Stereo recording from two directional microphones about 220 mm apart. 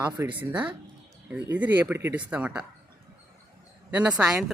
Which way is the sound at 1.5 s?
10° right (ahead or behind).